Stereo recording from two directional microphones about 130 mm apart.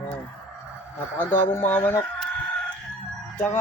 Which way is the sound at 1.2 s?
15° left (ahead or behind).